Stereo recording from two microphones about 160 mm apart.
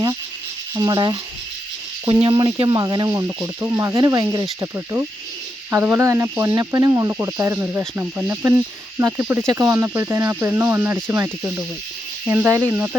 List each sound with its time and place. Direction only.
0.7 s speech: 25° right (ahead or behind)